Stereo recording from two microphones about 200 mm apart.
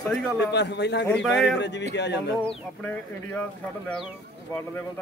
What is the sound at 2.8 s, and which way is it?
Speech, 5° left (ahead or behind).